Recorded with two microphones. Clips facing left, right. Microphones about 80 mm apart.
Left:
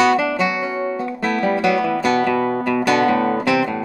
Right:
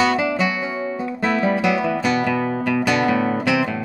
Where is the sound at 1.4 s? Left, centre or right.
Centre.